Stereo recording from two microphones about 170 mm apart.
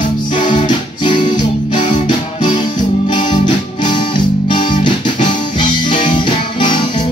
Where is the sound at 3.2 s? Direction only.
45° left (ahead or behind).